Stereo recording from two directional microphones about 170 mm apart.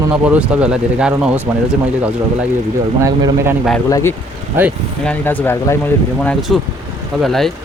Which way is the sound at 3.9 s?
15° left (ahead or behind).